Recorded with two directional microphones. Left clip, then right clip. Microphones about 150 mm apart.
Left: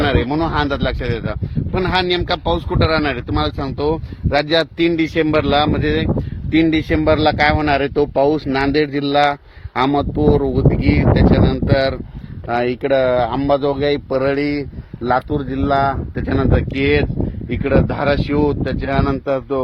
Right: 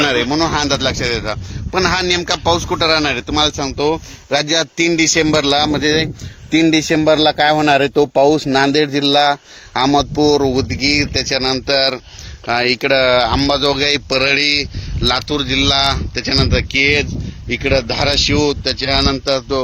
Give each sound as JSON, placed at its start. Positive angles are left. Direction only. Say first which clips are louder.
{"t": 0.0, "sound": "speech", "louder": "right 3 dB", "side_deg": -35}
{"t": 12.5, "sound": "speech", "louder": "right 3 dB", "side_deg": -25}
{"t": 15.3, "sound": "speech", "louder": "right 3 dB", "side_deg": -20}